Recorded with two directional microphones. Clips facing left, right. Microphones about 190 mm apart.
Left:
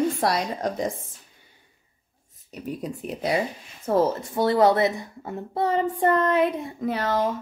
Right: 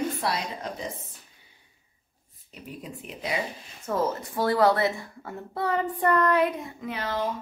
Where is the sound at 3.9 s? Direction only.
25° left (ahead or behind).